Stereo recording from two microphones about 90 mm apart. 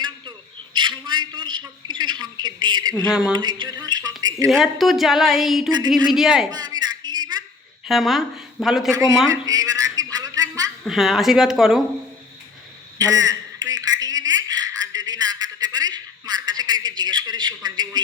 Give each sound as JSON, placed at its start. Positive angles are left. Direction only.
{"t": 0.0, "sound": "a sound", "side_deg": -60}
{"t": 1.9, "sound": "a woman's voice", "side_deg": -55}
{"t": 3.1, "sound": "speech", "side_deg": -5}
{"t": 3.3, "sound": "a woman's voice", "side_deg": -55}
{"t": 4.2, "sound": "speech", "side_deg": -45}
{"t": 4.4, "sound": "speech", "side_deg": 0}
{"t": 6.5, "sound": "a sound", "side_deg": -50}
{"t": 7.9, "sound": "speech", "side_deg": 0}
{"t": 8.9, "sound": "speech", "side_deg": -40}
{"t": 9.3, "sound": "a sound", "side_deg": -45}
{"t": 10.8, "sound": "speech", "side_deg": 0}
{"t": 13.0, "sound": "a sound", "side_deg": -45}